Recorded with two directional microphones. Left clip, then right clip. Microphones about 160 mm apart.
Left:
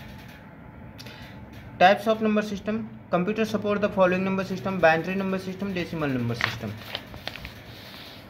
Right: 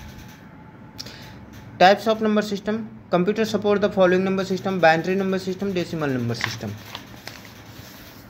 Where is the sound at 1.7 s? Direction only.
25° right (ahead or behind).